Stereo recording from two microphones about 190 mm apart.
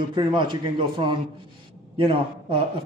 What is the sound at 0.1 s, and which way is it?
A man's voice, 25° right (ahead or behind).